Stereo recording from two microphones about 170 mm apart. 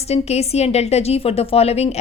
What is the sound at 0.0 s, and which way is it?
Speech, 40° left (ahead or behind).